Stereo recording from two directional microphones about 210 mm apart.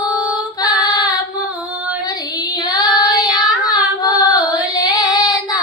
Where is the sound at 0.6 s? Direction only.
20° left (ahead or behind).